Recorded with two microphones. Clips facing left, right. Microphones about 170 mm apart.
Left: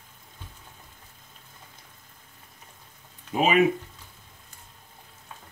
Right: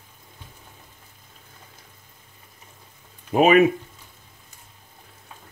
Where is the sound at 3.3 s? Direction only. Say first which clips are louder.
Right 6 dB; 60° right (ahead or behind).